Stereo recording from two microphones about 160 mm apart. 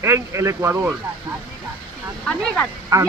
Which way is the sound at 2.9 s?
20° right (ahead or behind).